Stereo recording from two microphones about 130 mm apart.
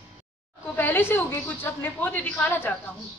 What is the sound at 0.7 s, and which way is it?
A woman's voice, 15° left (ahead or behind).